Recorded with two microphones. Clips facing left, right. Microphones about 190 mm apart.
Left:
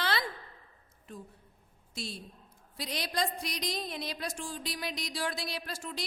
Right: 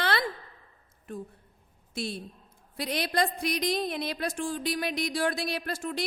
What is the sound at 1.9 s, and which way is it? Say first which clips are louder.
A man's voice: right 7 dB; 60° right (ahead or behind).